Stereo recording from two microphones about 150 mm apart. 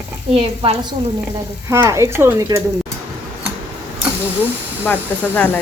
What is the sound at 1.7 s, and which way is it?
Speech, 20° right (ahead or behind).